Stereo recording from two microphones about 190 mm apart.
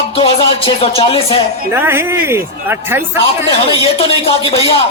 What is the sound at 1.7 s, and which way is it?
Speech, 10° right (ahead or behind).